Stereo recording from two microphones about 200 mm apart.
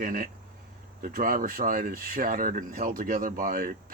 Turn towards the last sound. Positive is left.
turn(degrees=-45)  # may be behind; listen again after turning